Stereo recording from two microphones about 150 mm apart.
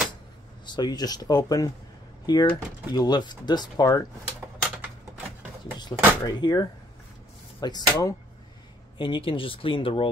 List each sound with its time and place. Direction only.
0.7 s speech: 30° left (ahead or behind)
4.6 s typewriter: 5° right (ahead or behind)
5.8 s speech: 30° left (ahead or behind)